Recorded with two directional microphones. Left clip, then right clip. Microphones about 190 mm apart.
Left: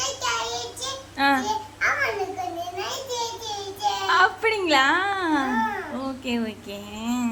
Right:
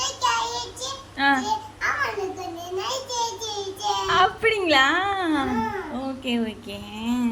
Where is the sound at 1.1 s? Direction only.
Centre (ahead or behind).